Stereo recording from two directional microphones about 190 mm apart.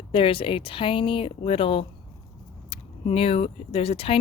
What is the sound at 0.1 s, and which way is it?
Speech, 30° left (ahead or behind).